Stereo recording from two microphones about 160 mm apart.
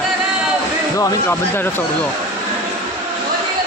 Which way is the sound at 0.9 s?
20° left (ahead or behind).